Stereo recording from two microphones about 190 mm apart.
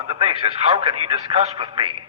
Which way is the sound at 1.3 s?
30° right (ahead or behind).